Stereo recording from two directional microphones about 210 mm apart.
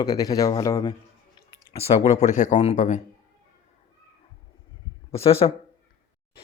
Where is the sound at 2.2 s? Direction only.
35° left (ahead or behind).